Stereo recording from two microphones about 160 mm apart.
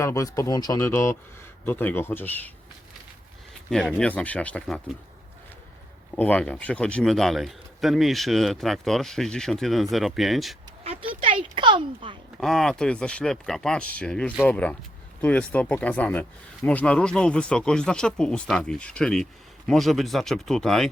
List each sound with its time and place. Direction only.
0.0 s speech: 20° left (ahead or behind)
3.7 s speech: 5° left (ahead or behind)
6.1 s speech: 10° left (ahead or behind)
10.8 s speech: 35° right (ahead or behind)
11.5 s a sound: 30° right (ahead or behind)
12.4 s speech: centre (ahead or behind)